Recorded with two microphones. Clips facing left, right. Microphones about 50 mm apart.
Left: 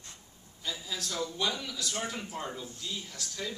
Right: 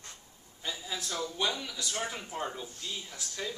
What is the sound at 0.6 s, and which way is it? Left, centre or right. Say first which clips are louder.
Speech: even; centre.